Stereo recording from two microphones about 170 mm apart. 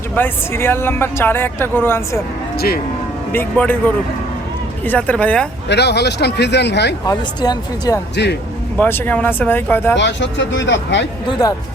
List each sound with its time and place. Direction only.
0.2 s speech: 15° left (ahead or behind)
2.6 s speech: 65° left (ahead or behind)
3.3 s speech: 10° left (ahead or behind)
4.9 s speech: 10° left (ahead or behind)
5.6 s speech: 80° left
7.0 s speech: 20° left (ahead or behind)
8.1 s speech: 90° left
8.8 s speech: 10° left (ahead or behind)
9.9 s speech: 90° left
11.3 s speech: 20° left (ahead or behind)